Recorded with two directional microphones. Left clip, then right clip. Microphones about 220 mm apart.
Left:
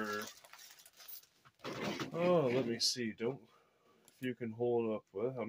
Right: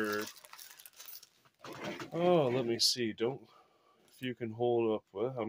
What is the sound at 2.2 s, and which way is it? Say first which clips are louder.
Speech: right 3 dB; 35° right (ahead or behind).